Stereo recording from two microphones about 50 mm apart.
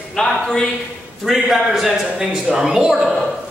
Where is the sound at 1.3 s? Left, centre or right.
Centre.